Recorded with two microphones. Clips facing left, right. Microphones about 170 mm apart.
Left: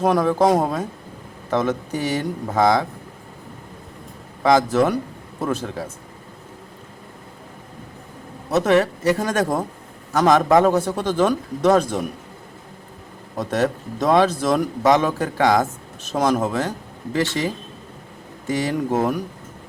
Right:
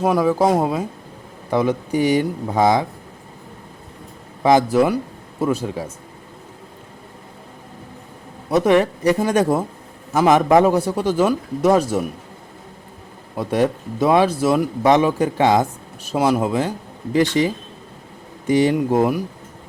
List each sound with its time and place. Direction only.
0.0 s a man's voice: 5° right (ahead or behind)
4.4 s a man's voice: 15° right (ahead or behind)
8.4 s a man's voice: 15° right (ahead or behind)
13.3 s a man's voice: 10° right (ahead or behind)